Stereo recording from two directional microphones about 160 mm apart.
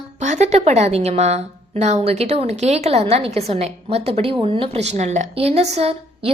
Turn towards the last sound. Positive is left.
turn(degrees=-40)  # may be behind; listen again after turning